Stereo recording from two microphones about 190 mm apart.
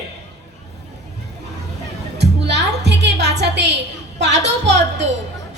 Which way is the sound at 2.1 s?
65° right (ahead or behind).